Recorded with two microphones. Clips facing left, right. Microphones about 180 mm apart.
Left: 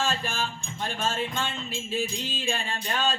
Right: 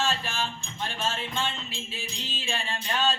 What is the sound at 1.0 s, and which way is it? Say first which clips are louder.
Music: left 1 dB; 45° left (ahead or behind).